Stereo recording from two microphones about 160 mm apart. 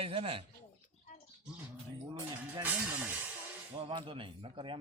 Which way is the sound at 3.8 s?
30° right (ahead or behind).